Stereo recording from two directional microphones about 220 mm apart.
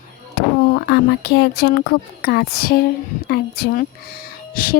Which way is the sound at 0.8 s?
45° left (ahead or behind).